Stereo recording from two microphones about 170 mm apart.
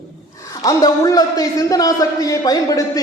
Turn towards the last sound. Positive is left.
turn(degrees=20)  # may be behind; listen again after turning